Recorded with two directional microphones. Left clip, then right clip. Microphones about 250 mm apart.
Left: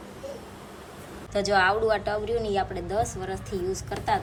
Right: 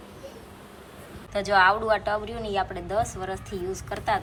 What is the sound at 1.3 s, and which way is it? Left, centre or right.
A woman's voice, centre.